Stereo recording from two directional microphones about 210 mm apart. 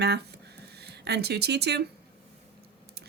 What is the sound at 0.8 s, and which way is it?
Speech, 50° right (ahead or behind).